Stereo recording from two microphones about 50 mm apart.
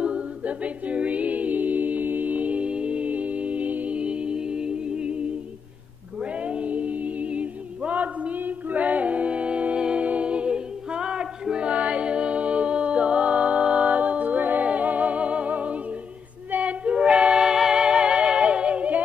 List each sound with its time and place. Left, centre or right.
0.0 s a capella: right
6.4 s music: right